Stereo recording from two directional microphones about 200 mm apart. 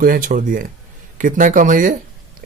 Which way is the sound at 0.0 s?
45° right (ahead or behind).